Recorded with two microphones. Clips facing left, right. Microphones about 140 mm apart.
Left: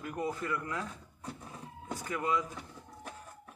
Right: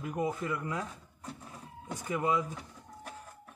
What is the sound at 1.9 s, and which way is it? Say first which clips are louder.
Speech: right 2 dB; 15° right (ahead or behind).